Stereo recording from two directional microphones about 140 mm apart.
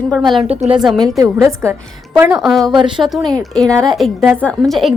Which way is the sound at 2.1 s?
5° right (ahead or behind).